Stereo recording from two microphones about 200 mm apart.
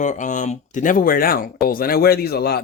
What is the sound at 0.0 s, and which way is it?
A man's voice, 40° left (ahead or behind).